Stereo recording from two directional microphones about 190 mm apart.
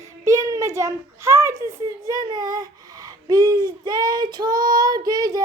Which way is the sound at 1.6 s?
20° right (ahead or behind).